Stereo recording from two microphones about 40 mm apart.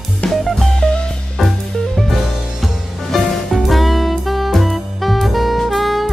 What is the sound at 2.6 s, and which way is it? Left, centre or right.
Music, centre.